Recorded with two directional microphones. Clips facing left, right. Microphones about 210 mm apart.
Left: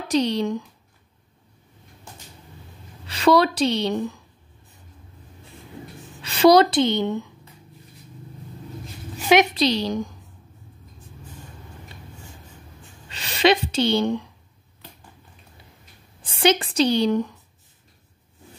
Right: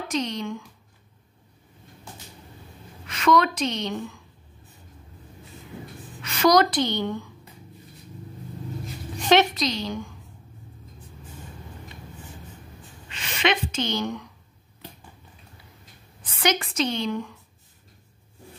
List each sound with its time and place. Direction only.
0.1 s a woman's voice: 35° left (ahead or behind)
3.1 s a woman's voice: 35° left (ahead or behind)
6.2 s a woman's voice: 30° left (ahead or behind)
9.1 s a sound: 10° left (ahead or behind)
9.5 s a woman's voice: 35° left (ahead or behind)
13.1 s a woman's voice: 35° left (ahead or behind)
16.3 s a woman's voice: 30° left (ahead or behind)